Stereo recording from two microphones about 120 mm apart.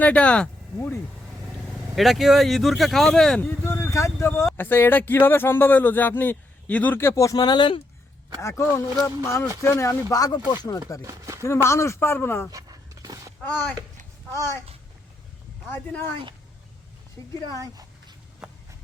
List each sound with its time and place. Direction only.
0.0 s speech: 10° left (ahead or behind)
1.6 s speech: centre (ahead or behind)
3.6 s speech: 20° left (ahead or behind); by 7.8 s 40° left (ahead or behind)
8.4 s speech: 25° left (ahead or behind)
11.0 s speech: 25° right (ahead or behind)
11.4 s speech: 25° left (ahead or behind)
12.5 s a sound: 30° right (ahead or behind)
13.4 s speech: 15° left (ahead or behind)
15.7 s speech: 20° left (ahead or behind)
17.2 s speech: 5° left (ahead or behind)